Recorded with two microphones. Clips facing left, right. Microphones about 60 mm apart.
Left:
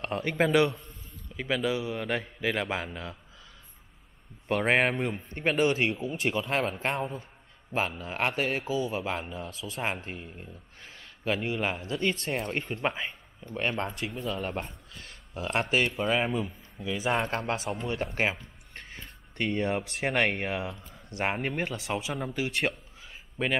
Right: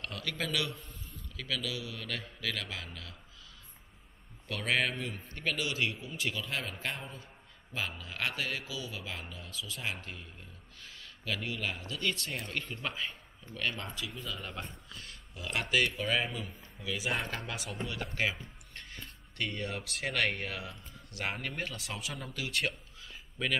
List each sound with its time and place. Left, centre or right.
0.0 s a man's voice: left
4.5 s a man's voice: left
18.8 s speech: left